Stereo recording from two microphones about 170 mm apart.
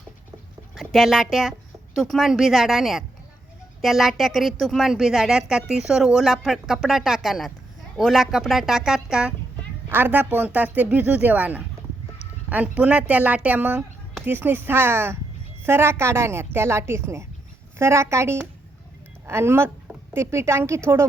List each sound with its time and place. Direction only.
0.8 s a woman's voice: centre (ahead or behind); by 21.0 s 15° right (ahead or behind)